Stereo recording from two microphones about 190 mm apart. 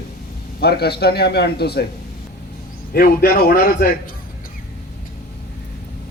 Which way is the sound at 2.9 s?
50° left (ahead or behind).